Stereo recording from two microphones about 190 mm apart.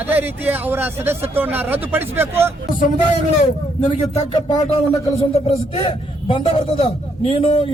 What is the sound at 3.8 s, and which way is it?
Speech, 35° left (ahead or behind).